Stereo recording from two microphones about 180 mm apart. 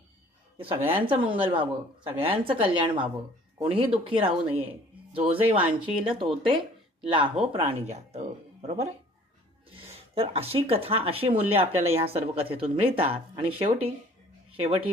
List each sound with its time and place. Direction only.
0.8 s a woman's voice: 10° right (ahead or behind)
1.0 s a woman's voice: 30° right (ahead or behind)
10.2 s speech: 35° right (ahead or behind)